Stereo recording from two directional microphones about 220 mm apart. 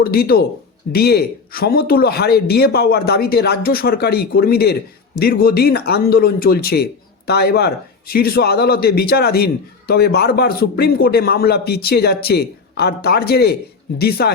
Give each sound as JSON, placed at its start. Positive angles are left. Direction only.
{"t": 0.0, "sound": "a man's voice", "side_deg": 45}